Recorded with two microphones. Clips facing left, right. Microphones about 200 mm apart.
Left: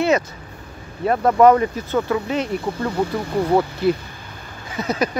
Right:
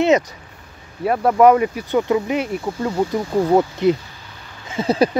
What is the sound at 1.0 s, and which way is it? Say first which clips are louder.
Speech: even; 10° right (ahead or behind).